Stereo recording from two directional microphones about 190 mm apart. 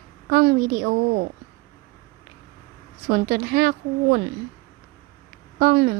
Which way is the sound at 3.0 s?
45° right (ahead or behind).